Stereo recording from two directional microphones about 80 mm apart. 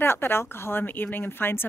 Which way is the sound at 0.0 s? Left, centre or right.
Left.